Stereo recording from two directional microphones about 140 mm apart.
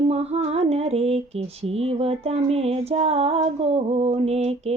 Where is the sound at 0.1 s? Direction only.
50° right (ahead or behind).